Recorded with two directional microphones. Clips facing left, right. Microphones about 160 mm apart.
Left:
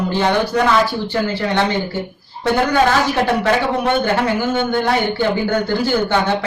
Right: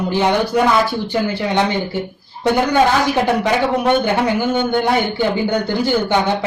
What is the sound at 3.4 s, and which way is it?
Speech, 15° right (ahead or behind).